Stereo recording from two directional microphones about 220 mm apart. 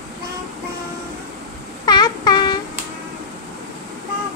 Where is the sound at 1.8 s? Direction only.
20° left (ahead or behind).